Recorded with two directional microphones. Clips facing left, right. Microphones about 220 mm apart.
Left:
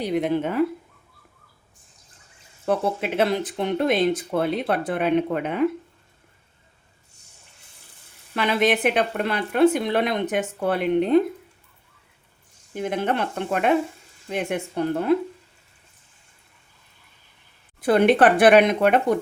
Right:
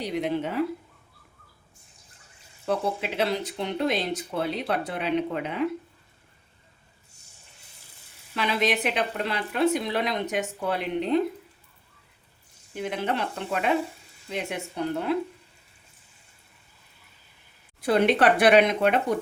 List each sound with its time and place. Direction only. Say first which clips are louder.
0.1 s a woman's voice: left 5 dB; 50° left (ahead or behind)
2.6 s a woman's voice: left 4 dB; 50° left (ahead or behind)
8.4 s a woman's voice: left 5 dB; 55° left (ahead or behind)
12.7 s a woman's voice: left 4 dB; 50° left (ahead or behind)
17.7 s a woman's voice: left 4 dB; 55° left (ahead or behind)